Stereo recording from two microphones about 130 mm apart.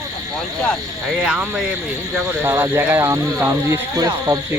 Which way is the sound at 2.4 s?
20° right (ahead or behind).